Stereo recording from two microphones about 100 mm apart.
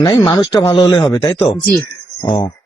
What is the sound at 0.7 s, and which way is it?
Speech, 30° left (ahead or behind).